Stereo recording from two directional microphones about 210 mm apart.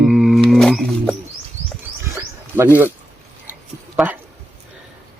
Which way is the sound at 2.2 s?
10° right (ahead or behind).